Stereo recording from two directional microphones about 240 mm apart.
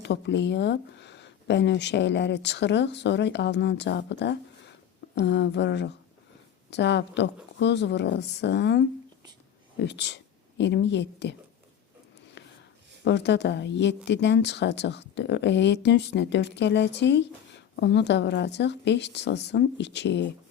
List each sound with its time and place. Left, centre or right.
0.0 s speech: left
9.8 s speech: left
12.4 s a sound: left
13.1 s speech: left